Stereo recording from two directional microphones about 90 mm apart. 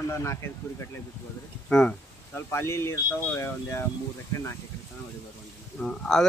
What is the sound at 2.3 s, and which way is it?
Speech, 30° left (ahead or behind).